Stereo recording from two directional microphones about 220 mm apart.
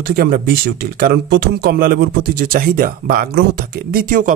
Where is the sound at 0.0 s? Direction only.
45° right (ahead or behind).